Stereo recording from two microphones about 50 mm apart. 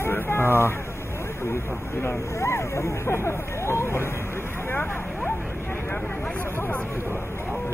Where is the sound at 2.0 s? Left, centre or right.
Left.